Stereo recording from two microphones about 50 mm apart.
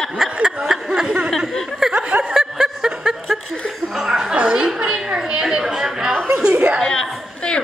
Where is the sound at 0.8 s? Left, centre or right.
Centre.